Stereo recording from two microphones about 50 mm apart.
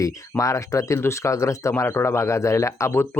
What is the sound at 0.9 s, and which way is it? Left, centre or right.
Speech, left.